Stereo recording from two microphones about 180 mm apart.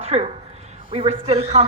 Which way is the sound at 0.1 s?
35° right (ahead or behind).